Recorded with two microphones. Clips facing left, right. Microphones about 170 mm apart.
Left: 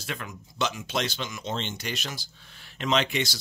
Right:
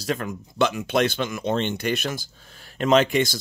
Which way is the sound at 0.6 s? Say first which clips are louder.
Right 8 dB; 55° right (ahead or behind).